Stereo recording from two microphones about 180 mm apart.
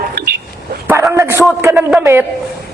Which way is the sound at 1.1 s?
15° right (ahead or behind).